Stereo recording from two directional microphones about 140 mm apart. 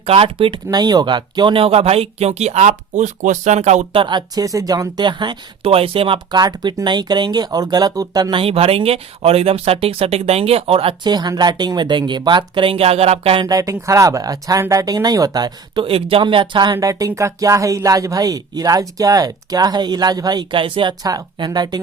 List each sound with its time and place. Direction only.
0.0 s speech: 40° right (ahead or behind)
3.9 s speech: 35° right (ahead or behind)
6.4 s speech: 30° right (ahead or behind); by 13.4 s 45° right (ahead or behind)
13.4 s speech: 25° right (ahead or behind)
16.7 s speech: 25° right (ahead or behind)